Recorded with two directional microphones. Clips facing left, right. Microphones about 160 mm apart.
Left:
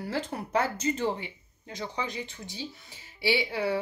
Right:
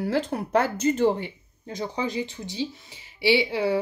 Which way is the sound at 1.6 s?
35° right (ahead or behind).